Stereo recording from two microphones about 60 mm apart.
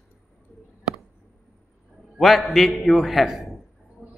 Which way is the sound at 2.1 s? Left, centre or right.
Centre.